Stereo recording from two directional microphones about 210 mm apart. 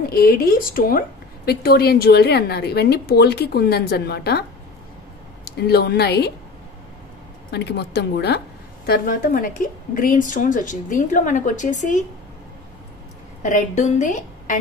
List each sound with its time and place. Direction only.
0.1 s a woman's voice: 45° left (ahead or behind)
7.5 s a woman's voice: 50° left (ahead or behind); by 12.0 s 35° left (ahead or behind)
13.4 s a woman's voice: 35° left (ahead or behind)